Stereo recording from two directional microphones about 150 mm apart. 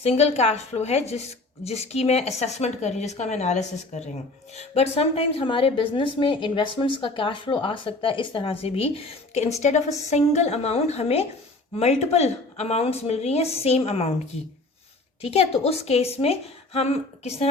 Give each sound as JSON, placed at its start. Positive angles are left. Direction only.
{"t": 0.0, "sound": "a woman's voice", "side_deg": 45}
{"t": 15.2, "sound": "speech", "side_deg": 40}